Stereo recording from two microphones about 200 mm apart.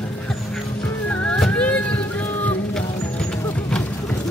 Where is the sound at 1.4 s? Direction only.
5° left (ahead or behind).